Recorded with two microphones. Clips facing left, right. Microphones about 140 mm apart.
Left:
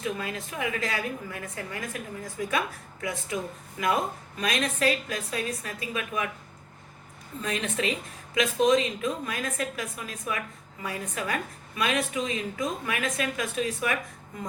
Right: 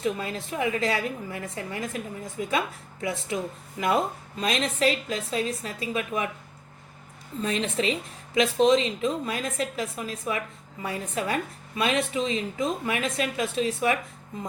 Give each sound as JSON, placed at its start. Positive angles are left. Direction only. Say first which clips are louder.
{"t": 0.0, "sound": "a woman's voice", "louder": "right 3 dB", "side_deg": -30}
{"t": 7.4, "sound": "a woman's voice", "louder": "right 3 dB", "side_deg": -30}